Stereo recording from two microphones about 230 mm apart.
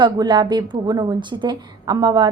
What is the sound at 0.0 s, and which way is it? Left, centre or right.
A woman's voice, centre.